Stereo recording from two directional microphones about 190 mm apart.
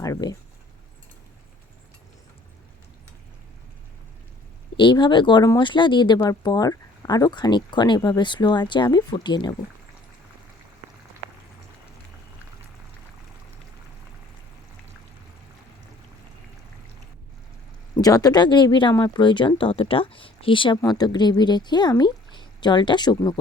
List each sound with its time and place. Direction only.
0.0 s speech: 20° left (ahead or behind)
4.8 s speech: 25° left (ahead or behind)
18.0 s speech: 20° left (ahead or behind)